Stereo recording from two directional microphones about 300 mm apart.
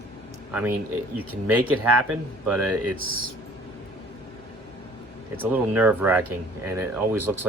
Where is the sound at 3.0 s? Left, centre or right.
Right.